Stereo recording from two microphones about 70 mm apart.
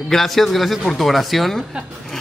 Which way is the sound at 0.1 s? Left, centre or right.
Centre.